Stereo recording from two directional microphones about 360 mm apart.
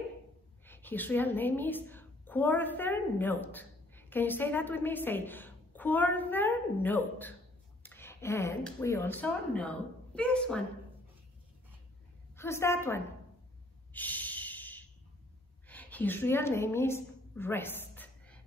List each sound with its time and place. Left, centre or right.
0.7 s a woman's voice: centre
12.4 s a woman's voice: centre
13.9 s snort: centre
15.7 s a sound: centre